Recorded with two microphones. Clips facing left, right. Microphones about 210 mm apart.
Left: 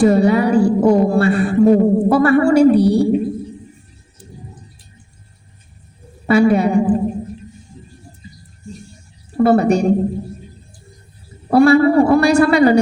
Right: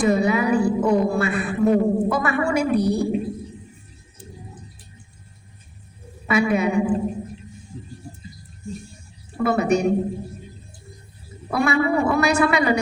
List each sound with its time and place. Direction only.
0.0 s speech: 30° left (ahead or behind)
6.2 s speech: 30° left (ahead or behind)
9.4 s speech: 35° left (ahead or behind)
11.5 s speech: 35° left (ahead or behind)